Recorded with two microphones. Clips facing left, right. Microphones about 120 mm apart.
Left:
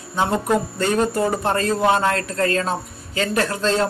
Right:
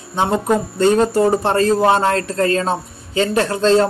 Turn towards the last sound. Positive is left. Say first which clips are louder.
# right 6 dB
turn(degrees=-30)  # may be behind; listen again after turning